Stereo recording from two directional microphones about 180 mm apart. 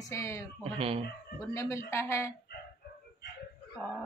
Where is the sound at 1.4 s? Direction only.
15° left (ahead or behind).